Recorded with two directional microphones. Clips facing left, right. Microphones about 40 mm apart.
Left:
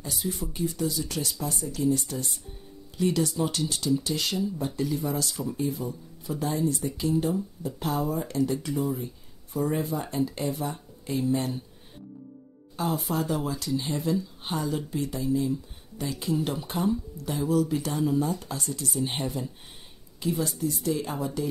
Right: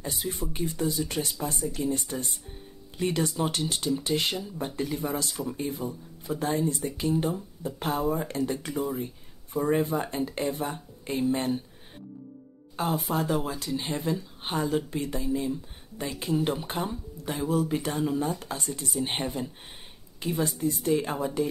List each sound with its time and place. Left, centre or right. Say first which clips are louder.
0.0 s speech: even; right
12.7 s speech: even; right